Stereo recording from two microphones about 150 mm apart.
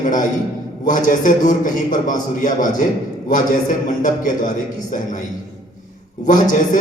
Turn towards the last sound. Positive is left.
turn(degrees=60)  # may be behind; listen again after turning